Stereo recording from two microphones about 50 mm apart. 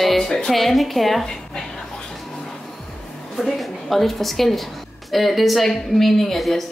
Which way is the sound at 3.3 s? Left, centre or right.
Centre.